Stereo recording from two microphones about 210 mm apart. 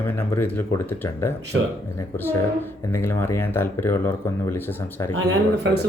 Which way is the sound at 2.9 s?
10° left (ahead or behind).